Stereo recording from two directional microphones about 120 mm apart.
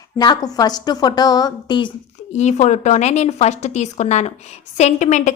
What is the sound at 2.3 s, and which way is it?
A woman's voice, 75° left (ahead or behind).